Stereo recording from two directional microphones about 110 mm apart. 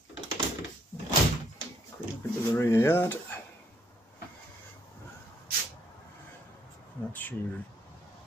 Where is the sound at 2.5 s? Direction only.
25° left (ahead or behind).